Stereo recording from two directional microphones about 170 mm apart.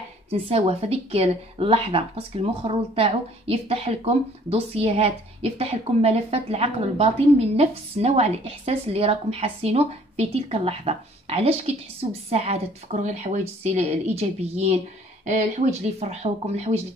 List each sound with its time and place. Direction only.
0.3 s speech: 35° right (ahead or behind)